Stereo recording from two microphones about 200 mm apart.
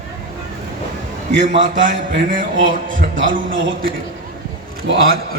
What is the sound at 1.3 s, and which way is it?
Speech, 60° right (ahead or behind).